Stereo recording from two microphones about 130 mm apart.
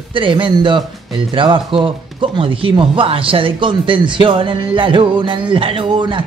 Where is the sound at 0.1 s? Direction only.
40° right (ahead or behind).